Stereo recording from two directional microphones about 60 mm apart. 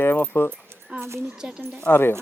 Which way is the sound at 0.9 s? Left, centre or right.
Right.